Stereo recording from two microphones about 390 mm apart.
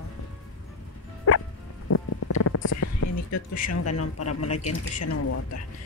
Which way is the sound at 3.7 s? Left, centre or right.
Left.